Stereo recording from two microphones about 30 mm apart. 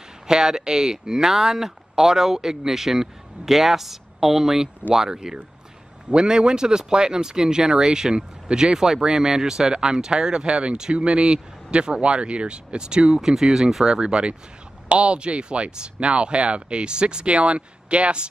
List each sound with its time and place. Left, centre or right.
0.4 s speech: centre
5.1 s speech: right
13.2 s speech: centre
13.9 s speech: right